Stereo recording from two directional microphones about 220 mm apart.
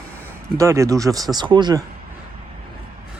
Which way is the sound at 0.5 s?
15° right (ahead or behind).